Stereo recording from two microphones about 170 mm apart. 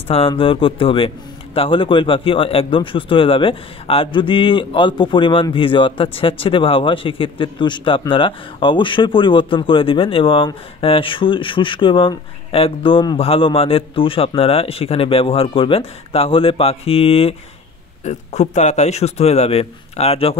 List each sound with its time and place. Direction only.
0.1 s a man's voice: 30° left (ahead or behind)